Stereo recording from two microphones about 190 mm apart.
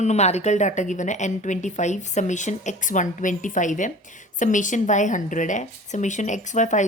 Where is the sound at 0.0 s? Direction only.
35° left (ahead or behind).